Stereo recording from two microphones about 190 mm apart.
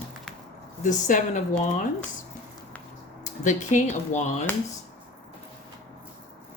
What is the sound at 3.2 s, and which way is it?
Speech, 40° left (ahead or behind).